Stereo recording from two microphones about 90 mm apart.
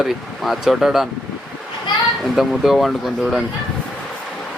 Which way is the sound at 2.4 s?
Centre (ahead or behind).